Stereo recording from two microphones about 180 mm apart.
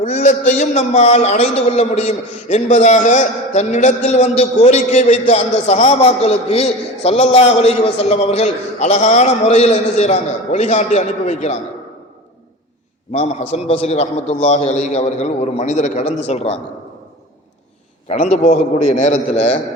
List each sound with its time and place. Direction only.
0.0 s a man's voice: 40° left (ahead or behind)
13.7 s a man's voice: 35° left (ahead or behind)
18.1 s a man's voice: 40° left (ahead or behind)